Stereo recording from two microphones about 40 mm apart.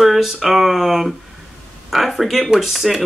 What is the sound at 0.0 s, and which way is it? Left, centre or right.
Speech, centre.